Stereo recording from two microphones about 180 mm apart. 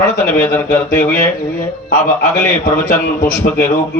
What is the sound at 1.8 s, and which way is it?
A man's voice, 50° left (ahead or behind).